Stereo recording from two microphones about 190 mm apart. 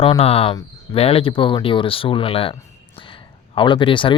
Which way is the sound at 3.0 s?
25° left (ahead or behind).